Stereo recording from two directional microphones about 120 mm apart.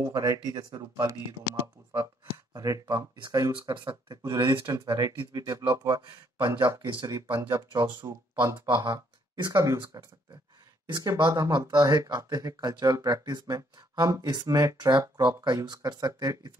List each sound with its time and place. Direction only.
0.0 s speech: 30° right (ahead or behind)
1.0 s speech: 25° right (ahead or behind)
4.7 s speech: 25° right (ahead or behind)
6.4 s speech: 25° right (ahead or behind)
6.9 s speech: 40° right (ahead or behind)
8.9 s speech: 30° right (ahead or behind)
10.9 s speech: 35° right (ahead or behind)